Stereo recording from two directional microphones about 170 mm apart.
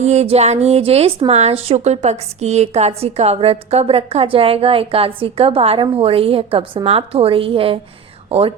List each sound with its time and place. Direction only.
0.0 s a woman's voice: 40° right (ahead or behind)